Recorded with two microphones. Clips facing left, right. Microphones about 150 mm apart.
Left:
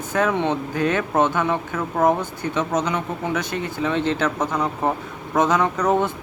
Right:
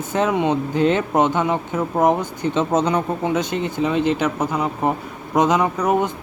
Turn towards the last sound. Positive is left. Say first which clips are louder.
# right 1 dB
turn(degrees=-15)  # may be behind; listen again after turning